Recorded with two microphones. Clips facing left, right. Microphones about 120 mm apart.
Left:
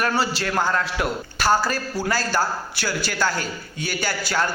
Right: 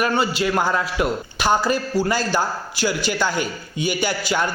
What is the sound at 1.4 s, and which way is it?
A man's voice, 15° right (ahead or behind).